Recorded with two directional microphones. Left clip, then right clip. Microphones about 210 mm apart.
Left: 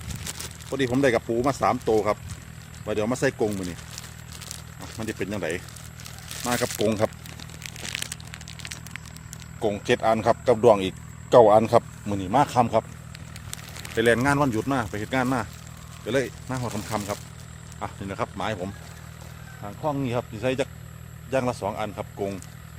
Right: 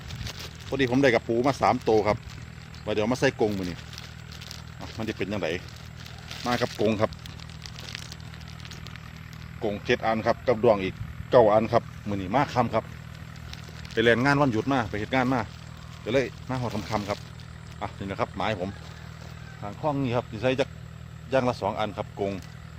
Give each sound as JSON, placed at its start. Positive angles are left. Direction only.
{"t": 0.7, "sound": "speech", "side_deg": 0}
{"t": 3.5, "sound": "speech", "side_deg": 10}
{"t": 9.6, "sound": "speech", "side_deg": 35}
{"t": 13.5, "sound": "speech", "side_deg": 5}